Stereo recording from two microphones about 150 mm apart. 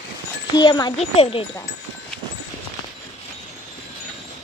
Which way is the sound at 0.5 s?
25° left (ahead or behind).